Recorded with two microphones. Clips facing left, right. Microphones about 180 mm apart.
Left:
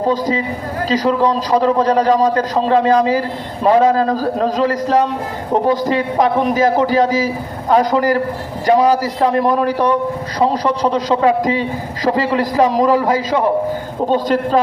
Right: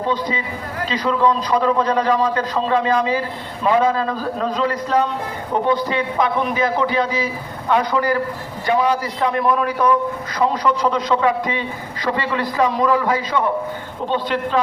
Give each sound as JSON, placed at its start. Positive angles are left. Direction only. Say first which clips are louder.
{"t": 0.0, "sound": "a man's voice", "louder": "left 5 dB", "side_deg": 40}